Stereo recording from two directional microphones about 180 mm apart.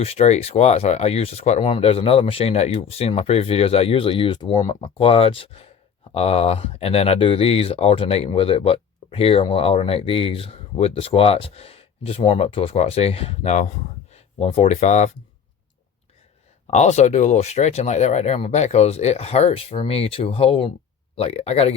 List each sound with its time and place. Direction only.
0.0 s speech: 35° left (ahead or behind)
16.6 s speech: 40° left (ahead or behind)